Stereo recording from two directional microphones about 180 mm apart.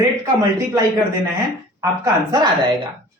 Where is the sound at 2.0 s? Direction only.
20° right (ahead or behind).